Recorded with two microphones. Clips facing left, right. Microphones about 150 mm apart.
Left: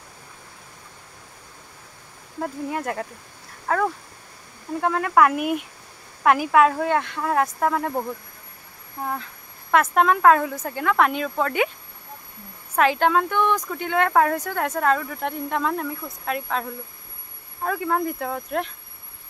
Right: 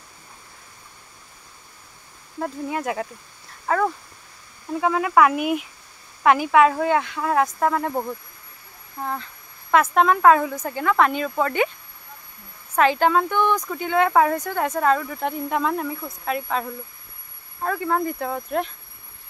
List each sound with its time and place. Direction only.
2.4 s speech: centre (ahead or behind)
12.7 s speech: centre (ahead or behind)